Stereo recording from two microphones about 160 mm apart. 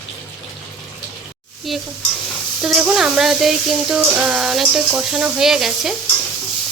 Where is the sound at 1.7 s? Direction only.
Centre (ahead or behind).